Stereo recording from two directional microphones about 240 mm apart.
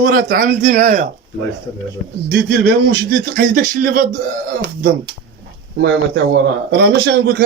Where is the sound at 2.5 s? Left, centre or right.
Right.